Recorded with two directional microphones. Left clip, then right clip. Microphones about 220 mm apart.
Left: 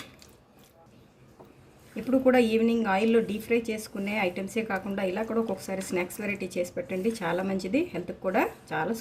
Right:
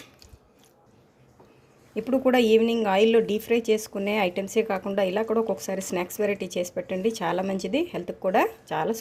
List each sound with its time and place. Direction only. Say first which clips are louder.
2.0 s a woman's voice: right 2 dB; 40° right (ahead or behind)